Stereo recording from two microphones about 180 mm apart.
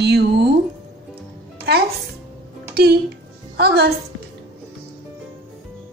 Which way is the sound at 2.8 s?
60° right (ahead or behind).